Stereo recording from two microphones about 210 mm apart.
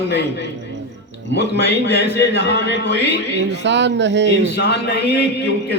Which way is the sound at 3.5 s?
55° right (ahead or behind).